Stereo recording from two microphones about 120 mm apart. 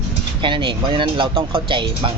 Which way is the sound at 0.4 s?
45° right (ahead or behind).